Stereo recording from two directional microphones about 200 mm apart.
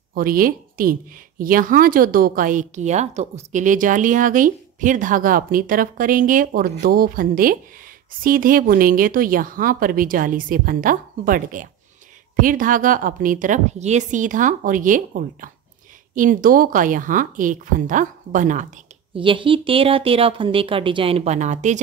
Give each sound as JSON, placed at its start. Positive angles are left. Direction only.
{"t": 0.1, "sound": "a woman's voice", "side_deg": -45}
{"t": 19.1, "sound": "speech", "side_deg": -25}